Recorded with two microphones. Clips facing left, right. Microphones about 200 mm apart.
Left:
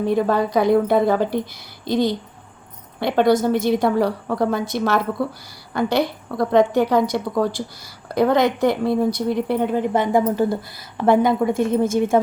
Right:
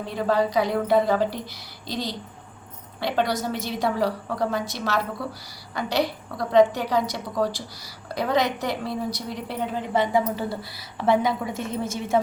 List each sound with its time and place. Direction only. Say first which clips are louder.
0.0 s a woman's voice: left 5 dB; 50° left (ahead or behind)